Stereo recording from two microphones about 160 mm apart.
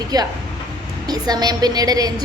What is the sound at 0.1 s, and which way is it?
A woman's voice, 25° right (ahead or behind).